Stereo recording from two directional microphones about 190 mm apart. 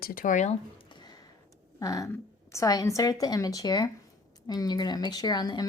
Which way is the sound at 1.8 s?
20° left (ahead or behind).